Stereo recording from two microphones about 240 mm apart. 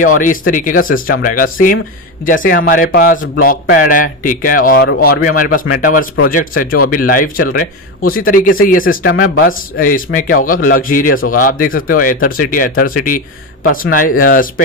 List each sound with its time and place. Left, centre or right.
0.5 s a man's voice: left
9.1 s speech: left
9.5 s a man's voice: left